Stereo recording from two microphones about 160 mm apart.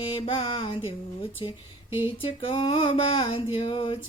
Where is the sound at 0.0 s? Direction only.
35° left (ahead or behind).